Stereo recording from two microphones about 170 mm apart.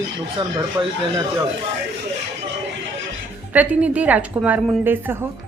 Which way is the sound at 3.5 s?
10° right (ahead or behind).